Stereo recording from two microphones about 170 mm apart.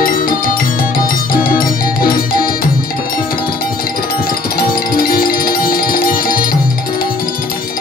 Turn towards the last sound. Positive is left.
turn(degrees=60)  # may be behind; listen again after turning